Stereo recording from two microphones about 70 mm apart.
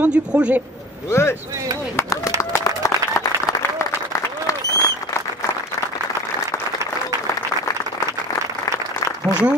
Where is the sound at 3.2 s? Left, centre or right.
Left.